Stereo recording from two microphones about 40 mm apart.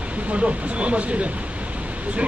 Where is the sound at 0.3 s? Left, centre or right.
Right.